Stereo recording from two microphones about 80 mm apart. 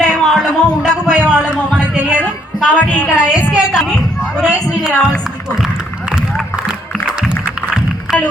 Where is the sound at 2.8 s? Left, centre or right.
Left.